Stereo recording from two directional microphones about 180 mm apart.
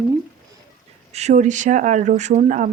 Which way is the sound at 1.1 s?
40° right (ahead or behind).